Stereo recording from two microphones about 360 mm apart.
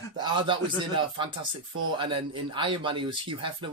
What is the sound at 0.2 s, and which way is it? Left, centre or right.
Speech, centre.